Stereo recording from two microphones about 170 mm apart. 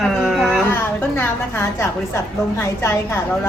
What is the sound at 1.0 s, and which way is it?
A woman's voice, 15° left (ahead or behind).